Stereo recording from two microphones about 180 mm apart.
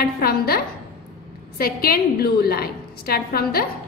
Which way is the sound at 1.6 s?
55° left (ahead or behind).